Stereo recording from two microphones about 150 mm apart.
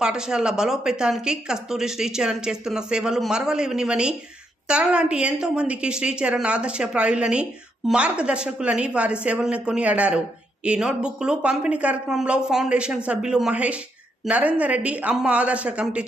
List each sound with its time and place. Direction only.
0.0 s a woman's voice: 5° right (ahead or behind)